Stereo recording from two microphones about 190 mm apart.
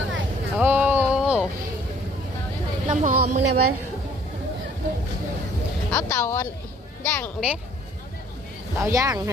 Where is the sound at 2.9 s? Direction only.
40° right (ahead or behind).